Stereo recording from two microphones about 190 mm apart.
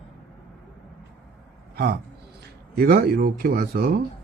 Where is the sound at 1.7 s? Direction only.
50° right (ahead or behind).